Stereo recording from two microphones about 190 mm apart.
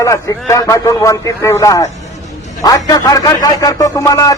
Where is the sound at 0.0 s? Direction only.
15° left (ahead or behind).